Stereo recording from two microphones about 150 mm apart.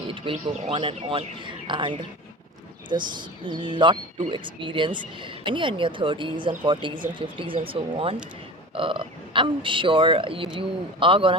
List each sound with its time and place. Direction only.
0.1 s speech: 35° right (ahead or behind)
2.9 s speech: 30° right (ahead or behind)